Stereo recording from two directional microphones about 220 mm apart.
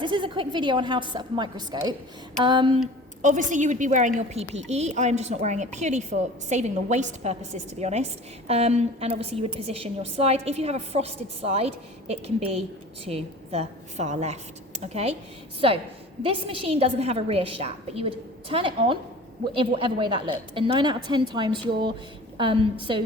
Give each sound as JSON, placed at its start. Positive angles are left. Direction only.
{"t": 0.0, "sound": "a woman's voice", "side_deg": -20}
{"t": 3.2, "sound": "a woman's voice", "side_deg": -35}